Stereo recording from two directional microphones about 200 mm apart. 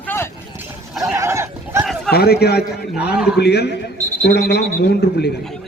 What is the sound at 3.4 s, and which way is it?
A man's voice, 55° left (ahead or behind).